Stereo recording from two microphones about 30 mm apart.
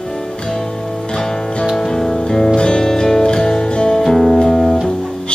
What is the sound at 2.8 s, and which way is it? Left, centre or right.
Music, centre.